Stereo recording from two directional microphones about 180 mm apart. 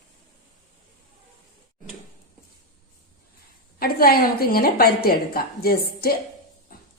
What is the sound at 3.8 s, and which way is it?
A woman's voice, 60° left (ahead or behind).